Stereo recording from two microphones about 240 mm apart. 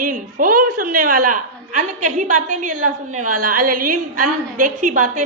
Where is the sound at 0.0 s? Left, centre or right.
Right.